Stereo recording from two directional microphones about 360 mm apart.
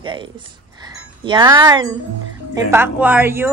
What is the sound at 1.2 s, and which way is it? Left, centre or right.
A woman's voice, centre.